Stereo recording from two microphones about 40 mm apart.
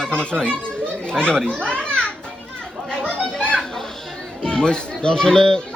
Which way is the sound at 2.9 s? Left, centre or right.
Left.